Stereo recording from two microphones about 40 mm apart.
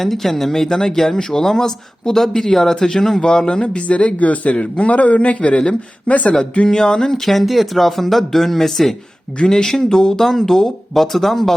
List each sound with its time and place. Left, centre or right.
0.0 s speech: centre; by 4.5 s left
4.5 s speech: left
4.9 s a man's voice: left
6.1 s a man's voice: left
6.7 s speech: centre
9.4 s speech: centre